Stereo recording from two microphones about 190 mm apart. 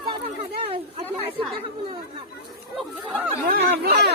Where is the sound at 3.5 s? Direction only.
55° right (ahead or behind).